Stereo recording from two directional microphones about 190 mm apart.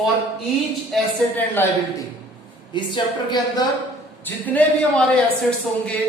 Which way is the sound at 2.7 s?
25° left (ahead or behind).